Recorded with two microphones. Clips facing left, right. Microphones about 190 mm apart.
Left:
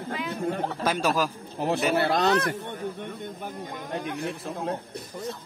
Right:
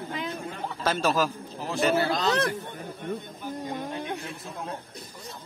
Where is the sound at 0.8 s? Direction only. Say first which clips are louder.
Right 1 dB; 15° left (ahead or behind).